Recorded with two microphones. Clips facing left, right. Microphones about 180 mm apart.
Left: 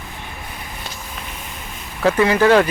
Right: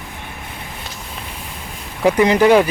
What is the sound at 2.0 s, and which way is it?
Speech, 15° right (ahead or behind).